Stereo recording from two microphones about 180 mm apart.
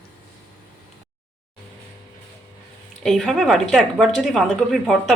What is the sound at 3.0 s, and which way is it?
Speech, centre (ahead or behind).